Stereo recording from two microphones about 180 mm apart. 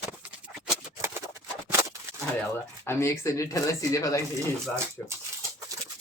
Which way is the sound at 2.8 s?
15° left (ahead or behind).